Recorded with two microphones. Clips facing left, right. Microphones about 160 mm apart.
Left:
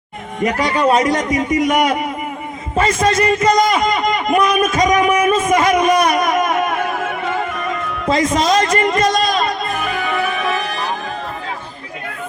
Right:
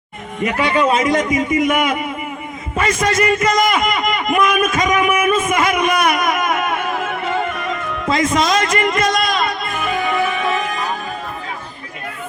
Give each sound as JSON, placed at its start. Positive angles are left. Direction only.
{"t": 0.4, "sound": "a man's voice", "side_deg": 40}
{"t": 2.7, "sound": "a man's voice", "side_deg": 30}
{"t": 8.0, "sound": "a man's voice", "side_deg": 35}